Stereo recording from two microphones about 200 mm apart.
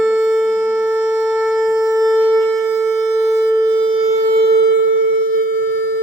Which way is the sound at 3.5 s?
20° right (ahead or behind).